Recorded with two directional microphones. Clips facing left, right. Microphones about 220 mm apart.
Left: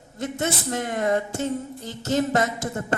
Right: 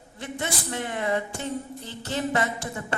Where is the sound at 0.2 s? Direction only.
45° left (ahead or behind).